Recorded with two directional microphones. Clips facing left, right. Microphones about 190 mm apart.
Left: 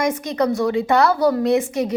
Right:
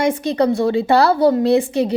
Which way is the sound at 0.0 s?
30° right (ahead or behind).